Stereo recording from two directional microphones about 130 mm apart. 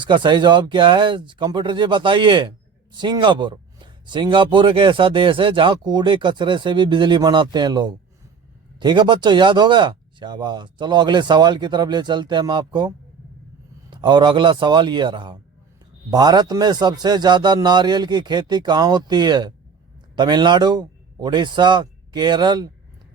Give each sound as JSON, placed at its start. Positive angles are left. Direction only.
{"t": 0.0, "sound": "speech", "side_deg": -35}
{"t": 13.9, "sound": "a man's voice", "side_deg": -35}